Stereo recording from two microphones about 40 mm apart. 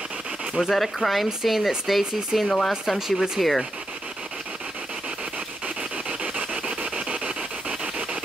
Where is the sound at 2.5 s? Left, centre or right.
Centre.